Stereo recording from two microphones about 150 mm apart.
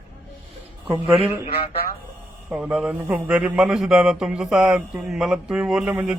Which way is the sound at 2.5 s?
5° right (ahead or behind).